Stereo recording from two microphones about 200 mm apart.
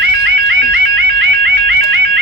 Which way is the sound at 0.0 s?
60° right (ahead or behind).